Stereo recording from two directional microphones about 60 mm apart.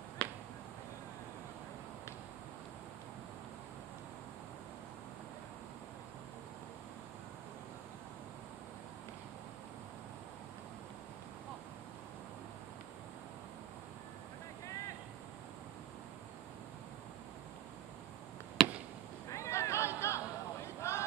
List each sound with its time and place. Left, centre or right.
0.2 s finger snapping: centre
18.6 s chop: centre
19.3 s a sound: left